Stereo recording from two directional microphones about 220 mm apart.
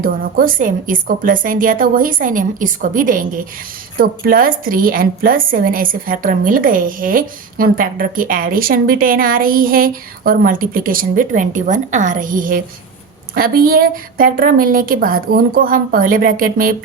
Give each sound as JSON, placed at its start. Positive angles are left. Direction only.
{"t": 0.0, "sound": "a woman's voice", "side_deg": -40}